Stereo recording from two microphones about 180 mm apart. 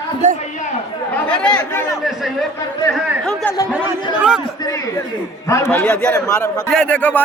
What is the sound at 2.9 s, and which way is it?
Speech, 5° left (ahead or behind).